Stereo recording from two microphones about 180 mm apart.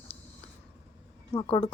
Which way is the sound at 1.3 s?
35° left (ahead or behind).